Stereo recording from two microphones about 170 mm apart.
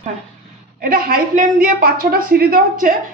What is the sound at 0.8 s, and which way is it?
A woman's voice, 60° right (ahead or behind).